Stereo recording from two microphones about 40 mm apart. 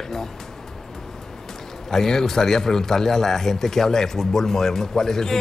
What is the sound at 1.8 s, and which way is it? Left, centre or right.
A man's voice, centre.